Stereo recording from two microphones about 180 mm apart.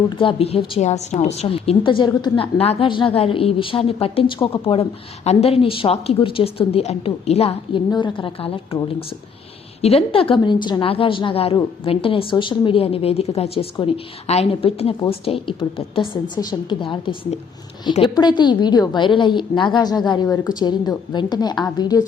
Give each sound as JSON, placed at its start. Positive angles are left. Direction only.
{"t": 0.2, "sound": "a woman's voice", "side_deg": 30}